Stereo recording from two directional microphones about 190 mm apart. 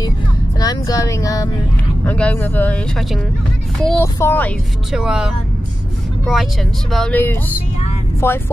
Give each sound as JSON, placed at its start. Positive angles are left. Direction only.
{"t": 0.6, "sound": "speech", "side_deg": 20}
{"t": 4.9, "sound": "speech", "side_deg": -5}
{"t": 6.9, "sound": "speech", "side_deg": 5}